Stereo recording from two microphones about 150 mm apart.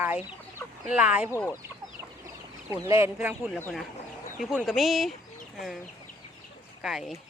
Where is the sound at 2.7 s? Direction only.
20° right (ahead or behind).